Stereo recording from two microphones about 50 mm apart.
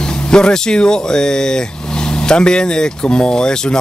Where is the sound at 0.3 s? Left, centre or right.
Centre.